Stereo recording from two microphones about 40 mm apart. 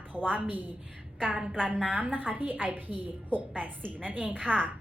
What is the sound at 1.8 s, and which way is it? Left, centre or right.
A woman's voice, right.